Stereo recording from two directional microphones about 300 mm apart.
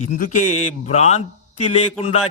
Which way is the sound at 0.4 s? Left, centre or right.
Centre.